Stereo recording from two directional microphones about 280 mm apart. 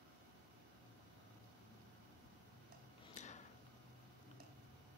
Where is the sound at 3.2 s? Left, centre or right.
Left.